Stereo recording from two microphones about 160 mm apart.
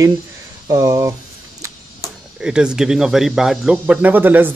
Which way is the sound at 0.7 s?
20° right (ahead or behind).